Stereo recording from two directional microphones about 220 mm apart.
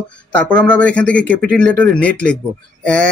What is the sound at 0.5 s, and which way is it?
Speech, 5° left (ahead or behind).